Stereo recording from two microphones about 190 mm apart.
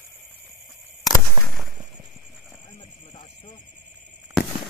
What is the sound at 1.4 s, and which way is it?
Fireworks, 25° right (ahead or behind).